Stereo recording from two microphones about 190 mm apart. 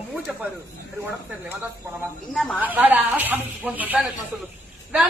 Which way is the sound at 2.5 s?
10° right (ahead or behind).